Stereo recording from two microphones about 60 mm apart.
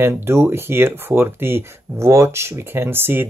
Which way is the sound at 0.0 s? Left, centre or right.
Right.